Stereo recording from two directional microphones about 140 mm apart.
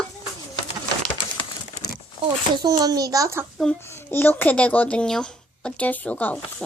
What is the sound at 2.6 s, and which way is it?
Speech, 25° right (ahead or behind).